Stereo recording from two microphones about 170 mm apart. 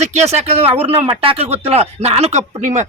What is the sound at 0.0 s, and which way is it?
Speech, 40° right (ahead or behind).